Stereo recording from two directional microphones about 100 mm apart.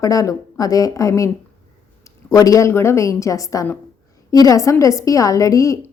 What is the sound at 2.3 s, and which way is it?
A woman's voice, 35° left (ahead or behind).